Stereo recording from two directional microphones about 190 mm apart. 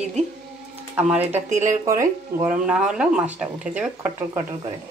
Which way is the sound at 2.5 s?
5° right (ahead or behind).